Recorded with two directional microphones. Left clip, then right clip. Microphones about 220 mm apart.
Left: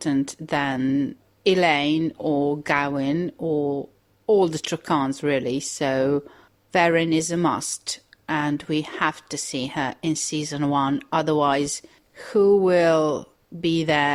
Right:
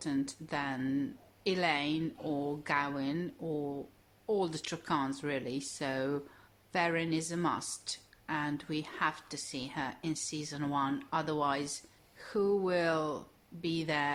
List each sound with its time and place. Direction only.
0.0 s a woman's voice: 30° left (ahead or behind)